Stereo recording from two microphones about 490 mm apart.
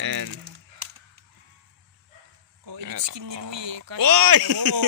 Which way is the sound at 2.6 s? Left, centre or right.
Right.